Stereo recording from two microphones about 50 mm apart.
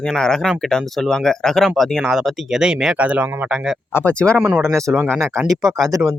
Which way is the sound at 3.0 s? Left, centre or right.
Right.